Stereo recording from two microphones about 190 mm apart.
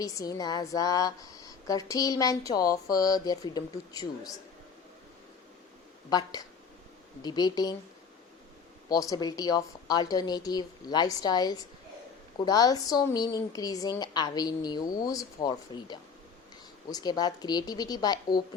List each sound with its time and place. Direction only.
0.0 s speech: 20° left (ahead or behind)
6.1 s speech: 20° left (ahead or behind)
8.9 s speech: 20° left (ahead or behind)